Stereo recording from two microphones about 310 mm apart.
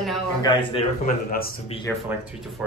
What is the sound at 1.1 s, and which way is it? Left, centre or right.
Speech, left.